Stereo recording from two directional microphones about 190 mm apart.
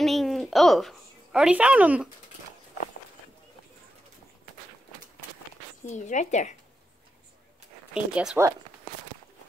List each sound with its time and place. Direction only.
0.0 s a sound: centre (ahead or behind)
5.9 s speech: 40° left (ahead or behind)
7.9 s speech: 5° right (ahead or behind)